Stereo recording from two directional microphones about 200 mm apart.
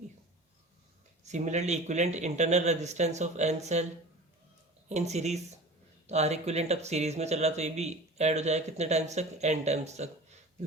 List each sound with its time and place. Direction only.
1.2 s speech: 35° right (ahead or behind)
4.9 s speech: 35° right (ahead or behind)